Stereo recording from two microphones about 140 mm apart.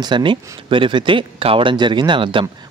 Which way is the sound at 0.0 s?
35° right (ahead or behind).